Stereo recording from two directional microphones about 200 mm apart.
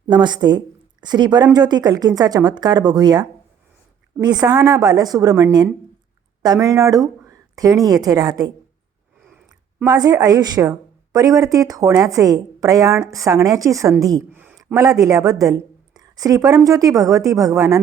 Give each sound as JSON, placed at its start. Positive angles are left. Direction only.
{"t": 0.1, "sound": "speech", "side_deg": -20}
{"t": 9.8, "sound": "a woman's voice", "side_deg": -20}
{"t": 14.8, "sound": "a woman's voice", "side_deg": -15}